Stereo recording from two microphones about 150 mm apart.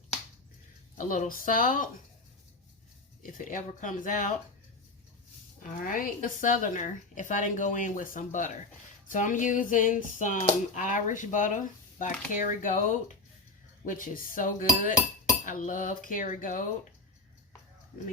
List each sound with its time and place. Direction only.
0.9 s a woman's voice: 65° left (ahead or behind)
3.3 s a woman's voice: 60° left (ahead or behind)
5.6 s a woman's voice: 65° left (ahead or behind)